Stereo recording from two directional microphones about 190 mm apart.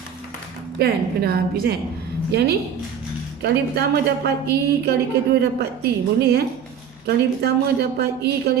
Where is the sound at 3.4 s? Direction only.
60° right (ahead or behind).